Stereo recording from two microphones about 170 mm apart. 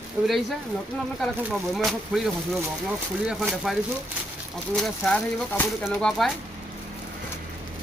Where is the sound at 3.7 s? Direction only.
Centre (ahead or behind).